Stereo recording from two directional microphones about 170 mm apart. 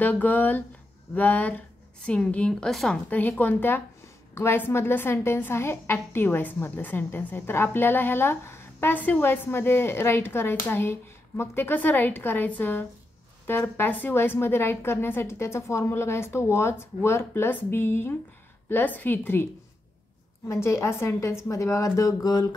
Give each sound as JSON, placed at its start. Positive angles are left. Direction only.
{"t": 0.0, "sound": "a woman's voice", "side_deg": 10}
{"t": 20.4, "sound": "a woman's voice", "side_deg": 15}